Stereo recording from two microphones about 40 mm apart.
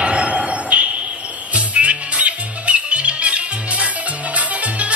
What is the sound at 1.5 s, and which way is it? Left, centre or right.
Music, right.